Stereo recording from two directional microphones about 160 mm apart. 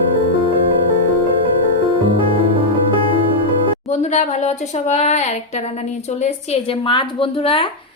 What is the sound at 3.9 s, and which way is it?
Speech, 45° left (ahead or behind).